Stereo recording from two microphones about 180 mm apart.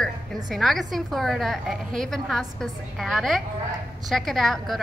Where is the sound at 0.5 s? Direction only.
Centre (ahead or behind).